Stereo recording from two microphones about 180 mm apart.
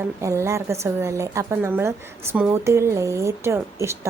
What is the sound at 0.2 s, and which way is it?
A woman's voice, 15° right (ahead or behind).